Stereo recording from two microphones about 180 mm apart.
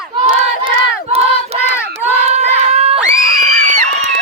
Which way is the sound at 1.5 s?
35° right (ahead or behind).